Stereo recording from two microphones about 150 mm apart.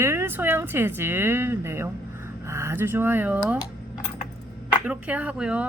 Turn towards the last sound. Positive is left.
turn(degrees=-5)  # may be behind; listen again after turning